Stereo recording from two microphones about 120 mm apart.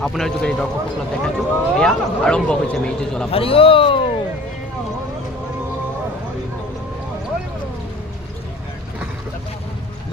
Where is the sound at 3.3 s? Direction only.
50° left (ahead or behind).